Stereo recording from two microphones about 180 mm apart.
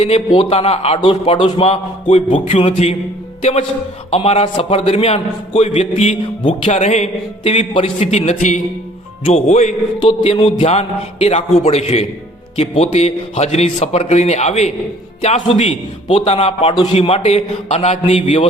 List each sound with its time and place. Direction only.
0.0 s a man's voice: 35° left (ahead or behind)
4.1 s a man's voice: 35° left (ahead or behind)